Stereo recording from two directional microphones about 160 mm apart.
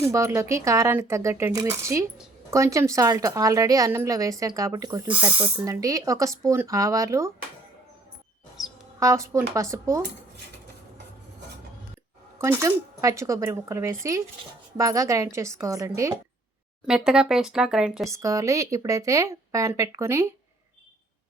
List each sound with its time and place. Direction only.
0.0 s a woman's voice: 15° right (ahead or behind)
5.0 s a woman's voice: 10° right (ahead or behind)
9.0 s a woman's voice: 20° right (ahead or behind)
12.4 s a woman's voice: 15° right (ahead or behind)
16.8 s speech: 5° right (ahead or behind)
18.1 s a woman's voice: 20° right (ahead or behind)